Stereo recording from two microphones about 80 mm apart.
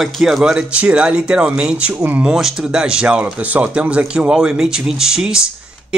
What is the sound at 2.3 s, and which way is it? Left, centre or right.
Speech, centre.